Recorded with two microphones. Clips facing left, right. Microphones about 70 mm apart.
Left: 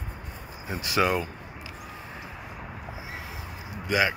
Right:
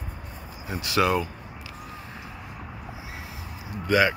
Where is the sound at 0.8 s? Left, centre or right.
Centre.